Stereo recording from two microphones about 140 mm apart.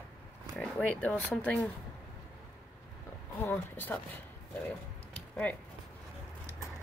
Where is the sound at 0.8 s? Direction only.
10° left (ahead or behind).